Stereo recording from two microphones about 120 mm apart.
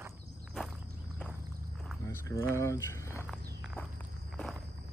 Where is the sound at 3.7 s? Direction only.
5° left (ahead or behind).